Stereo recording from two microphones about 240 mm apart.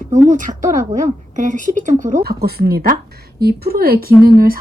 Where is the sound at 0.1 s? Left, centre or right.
Right.